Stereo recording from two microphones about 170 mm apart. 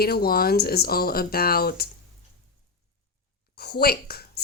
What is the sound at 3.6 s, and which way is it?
Speech, 65° left (ahead or behind).